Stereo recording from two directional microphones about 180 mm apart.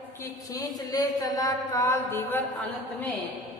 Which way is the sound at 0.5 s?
20° left (ahead or behind).